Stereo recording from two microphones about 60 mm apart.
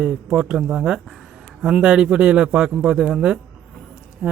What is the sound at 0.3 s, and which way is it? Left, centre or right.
Speech, centre.